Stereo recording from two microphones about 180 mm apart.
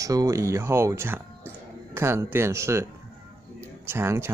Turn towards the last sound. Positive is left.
turn(degrees=-15)  # may be behind; listen again after turning